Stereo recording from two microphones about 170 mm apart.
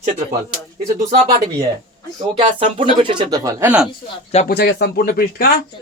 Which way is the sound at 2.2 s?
35° right (ahead or behind).